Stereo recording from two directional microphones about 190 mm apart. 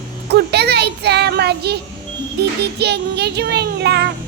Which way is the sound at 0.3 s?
60° right (ahead or behind).